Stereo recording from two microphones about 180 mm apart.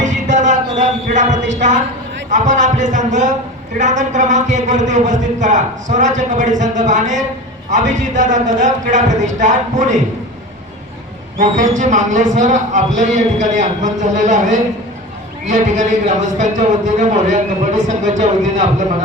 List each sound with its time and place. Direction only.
0.0 s music: 45° right (ahead or behind)
1.5 s a man's voice: 45° right (ahead or behind)
11.7 s a man's voice: 45° right (ahead or behind)